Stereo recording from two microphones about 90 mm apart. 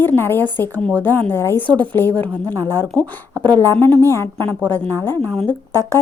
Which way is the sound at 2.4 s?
40° right (ahead or behind).